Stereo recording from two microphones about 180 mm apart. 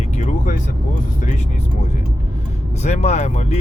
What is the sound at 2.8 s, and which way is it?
Speech, 40° left (ahead or behind).